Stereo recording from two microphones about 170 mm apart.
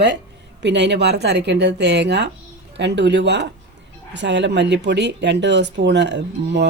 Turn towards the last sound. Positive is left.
turn(degrees=-90)